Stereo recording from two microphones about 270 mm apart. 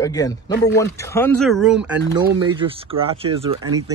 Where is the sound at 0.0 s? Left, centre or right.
Centre.